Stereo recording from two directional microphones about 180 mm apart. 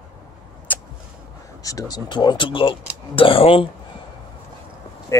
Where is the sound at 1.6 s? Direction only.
20° left (ahead or behind).